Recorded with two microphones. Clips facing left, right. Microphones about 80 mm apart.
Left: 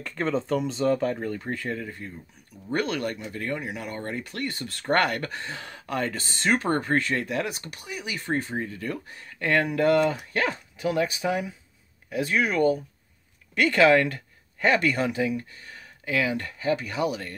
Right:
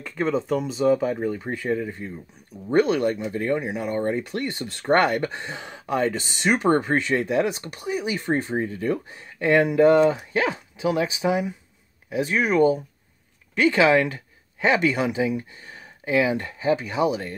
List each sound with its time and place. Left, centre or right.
0.0 s speech: centre; by 17.4 s right